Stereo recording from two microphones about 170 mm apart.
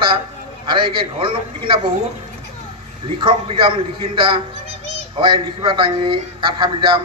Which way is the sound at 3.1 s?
30° right (ahead or behind).